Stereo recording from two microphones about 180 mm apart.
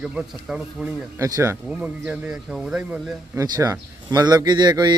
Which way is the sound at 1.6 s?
5° right (ahead or behind).